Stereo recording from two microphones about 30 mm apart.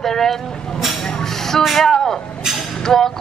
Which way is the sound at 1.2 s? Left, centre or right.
Centre.